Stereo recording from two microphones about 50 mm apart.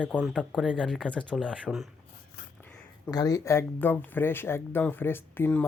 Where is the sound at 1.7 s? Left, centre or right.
Centre.